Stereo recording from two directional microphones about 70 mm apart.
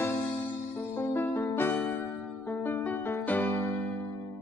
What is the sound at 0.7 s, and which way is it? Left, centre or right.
Music, left.